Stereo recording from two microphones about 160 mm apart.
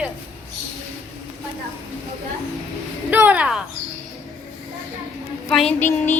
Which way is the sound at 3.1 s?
10° right (ahead or behind).